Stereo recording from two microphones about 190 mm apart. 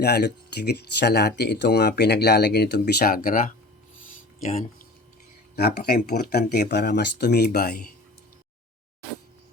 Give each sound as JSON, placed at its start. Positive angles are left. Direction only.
{"t": 0.0, "sound": "speech", "side_deg": 60}
{"t": 5.5, "sound": "speech", "side_deg": 55}